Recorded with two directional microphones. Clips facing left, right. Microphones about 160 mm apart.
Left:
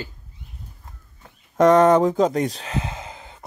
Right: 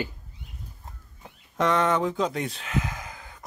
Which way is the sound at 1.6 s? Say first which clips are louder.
Left 9 dB; 45° left (ahead or behind).